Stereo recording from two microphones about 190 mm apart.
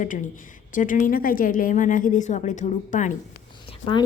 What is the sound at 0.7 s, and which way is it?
A woman's voice, 45° left (ahead or behind).